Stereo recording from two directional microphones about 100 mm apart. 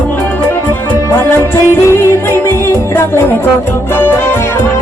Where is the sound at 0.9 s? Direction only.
25° left (ahead or behind).